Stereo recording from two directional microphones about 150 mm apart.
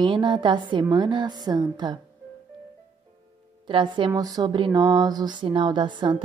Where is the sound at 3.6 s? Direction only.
30° right (ahead or behind).